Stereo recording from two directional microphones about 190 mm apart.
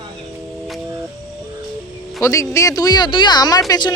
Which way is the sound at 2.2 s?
15° left (ahead or behind).